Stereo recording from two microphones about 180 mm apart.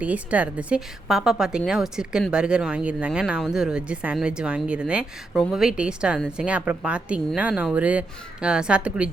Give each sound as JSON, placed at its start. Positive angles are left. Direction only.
{"t": 0.0, "sound": "a woman's voice", "side_deg": -10}